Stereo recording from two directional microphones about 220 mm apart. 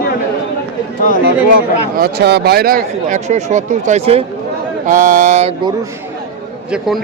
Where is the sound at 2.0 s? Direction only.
50° right (ahead or behind).